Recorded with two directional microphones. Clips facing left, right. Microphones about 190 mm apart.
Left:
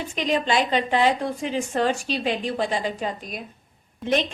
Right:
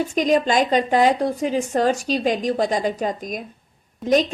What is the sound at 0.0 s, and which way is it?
A woman's voice, 45° right (ahead or behind).